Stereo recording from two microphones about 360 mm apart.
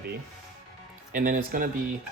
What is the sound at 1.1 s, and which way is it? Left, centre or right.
Speech, right.